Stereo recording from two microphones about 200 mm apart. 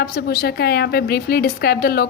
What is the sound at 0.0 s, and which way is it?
A woman's voice, 50° left (ahead or behind).